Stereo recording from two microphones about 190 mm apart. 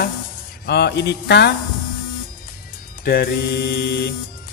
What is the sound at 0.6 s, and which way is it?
Speech, 60° left (ahead or behind).